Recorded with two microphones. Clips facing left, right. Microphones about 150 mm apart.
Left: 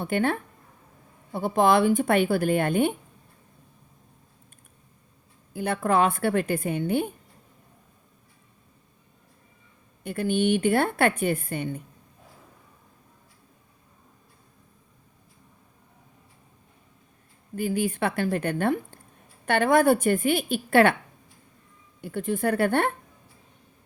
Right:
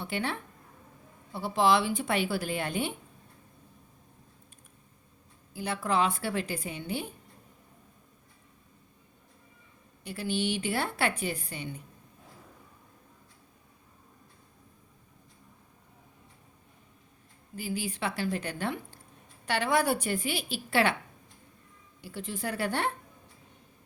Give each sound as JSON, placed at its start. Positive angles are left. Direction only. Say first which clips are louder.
{"t": 0.0, "sound": "a woman's voice", "louder": "left 8 dB", "side_deg": 50}
{"t": 5.5, "sound": "a woman's voice", "louder": "left 6 dB", "side_deg": 55}
{"t": 10.0, "sound": "a woman's voice", "louder": "left 7 dB", "side_deg": 50}
{"t": 17.5, "sound": "a woman's voice", "louder": "left 8 dB", "side_deg": 55}
{"t": 22.0, "sound": "a woman's voice", "louder": "left 10 dB", "side_deg": 55}